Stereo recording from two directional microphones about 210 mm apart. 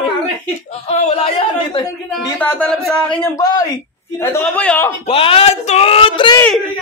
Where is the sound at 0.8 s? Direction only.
30° left (ahead or behind).